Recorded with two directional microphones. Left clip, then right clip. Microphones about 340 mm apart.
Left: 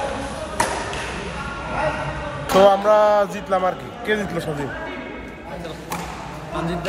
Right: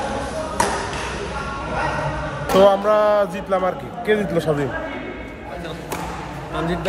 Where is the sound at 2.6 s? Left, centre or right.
Centre.